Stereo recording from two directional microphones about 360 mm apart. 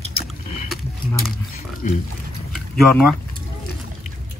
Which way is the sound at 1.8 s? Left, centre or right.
Left.